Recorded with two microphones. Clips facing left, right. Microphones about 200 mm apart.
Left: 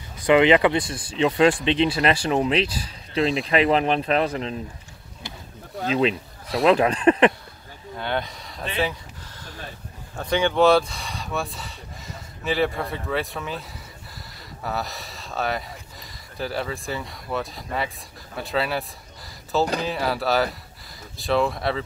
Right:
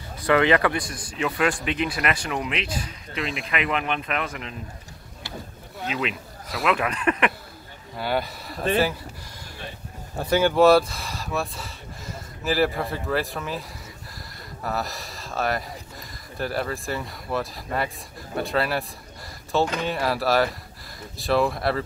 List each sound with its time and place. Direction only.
0.3 s speech: 20° left (ahead or behind)
5.9 s speech: 30° left (ahead or behind)
8.0 s speech: 5° right (ahead or behind)
10.1 s speech: 5° right (ahead or behind)
19.6 s speech: 35° left (ahead or behind)
19.9 s speech: centre (ahead or behind)